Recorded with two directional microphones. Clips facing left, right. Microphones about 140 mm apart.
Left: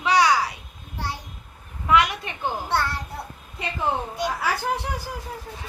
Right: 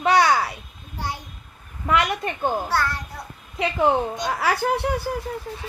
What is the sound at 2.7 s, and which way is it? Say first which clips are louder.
Speech: right 1 dB; 25° left (ahead or behind).